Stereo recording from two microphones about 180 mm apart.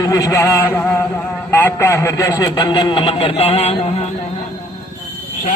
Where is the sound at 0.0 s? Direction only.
20° left (ahead or behind).